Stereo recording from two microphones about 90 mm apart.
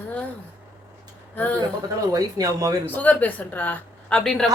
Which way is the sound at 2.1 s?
40° right (ahead or behind).